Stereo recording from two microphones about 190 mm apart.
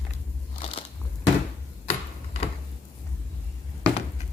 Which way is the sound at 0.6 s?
30° left (ahead or behind).